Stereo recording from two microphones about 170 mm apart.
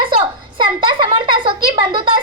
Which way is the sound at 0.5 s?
30° right (ahead or behind).